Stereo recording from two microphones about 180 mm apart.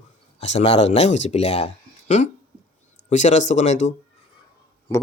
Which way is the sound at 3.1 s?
40° left (ahead or behind).